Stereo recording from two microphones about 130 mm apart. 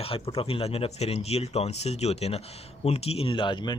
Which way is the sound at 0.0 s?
50° left (ahead or behind).